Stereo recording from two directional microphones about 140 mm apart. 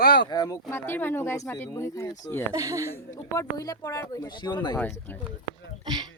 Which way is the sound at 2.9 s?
20° left (ahead or behind).